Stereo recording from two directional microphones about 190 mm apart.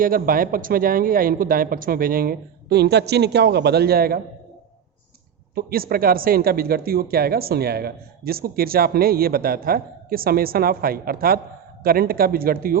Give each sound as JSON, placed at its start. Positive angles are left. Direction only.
{"t": 0.0, "sound": "speech", "side_deg": -50}
{"t": 5.5, "sound": "speech", "side_deg": -50}